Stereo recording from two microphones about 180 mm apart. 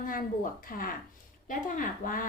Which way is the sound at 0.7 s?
50° left (ahead or behind).